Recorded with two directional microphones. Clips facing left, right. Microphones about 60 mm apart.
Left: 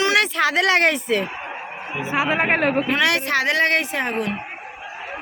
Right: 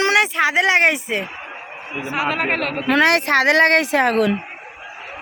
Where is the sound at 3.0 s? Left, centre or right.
Right.